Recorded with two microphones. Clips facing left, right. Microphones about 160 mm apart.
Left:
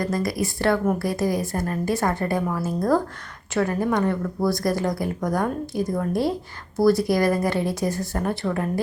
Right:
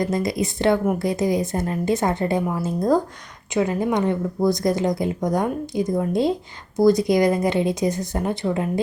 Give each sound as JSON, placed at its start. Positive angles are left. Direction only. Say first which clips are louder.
{"t": 0.0, "sound": "speech", "louder": "right 2 dB", "side_deg": -20}